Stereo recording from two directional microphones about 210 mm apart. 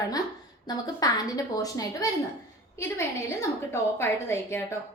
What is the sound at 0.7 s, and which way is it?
A woman's voice, 15° left (ahead or behind).